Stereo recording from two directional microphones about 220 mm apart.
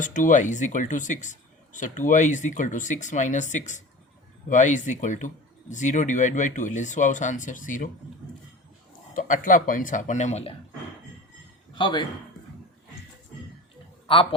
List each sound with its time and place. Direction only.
0.0 s speech: 35° left (ahead or behind)
9.1 s speech: 35° left (ahead or behind)
11.7 s speech: 20° left (ahead or behind)